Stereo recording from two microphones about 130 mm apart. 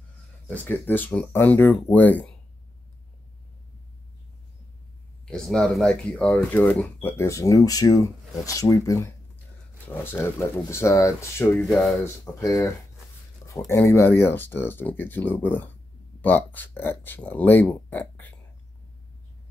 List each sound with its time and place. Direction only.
0.5 s speech: 15° left (ahead or behind)
5.2 s speech: 5° left (ahead or behind); by 9.1 s 25° left (ahead or behind)
10.7 s speech: 20° left (ahead or behind)
11.6 s speech: centre (ahead or behind)
12.4 s speech: 25° left (ahead or behind)